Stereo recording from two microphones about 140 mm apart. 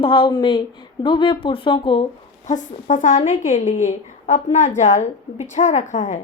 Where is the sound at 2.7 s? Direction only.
65° left (ahead or behind).